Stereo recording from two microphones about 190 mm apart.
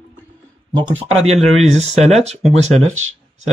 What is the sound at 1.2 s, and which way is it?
Speech, 35° right (ahead or behind).